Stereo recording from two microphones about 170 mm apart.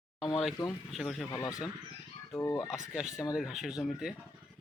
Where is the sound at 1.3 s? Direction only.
20° left (ahead or behind).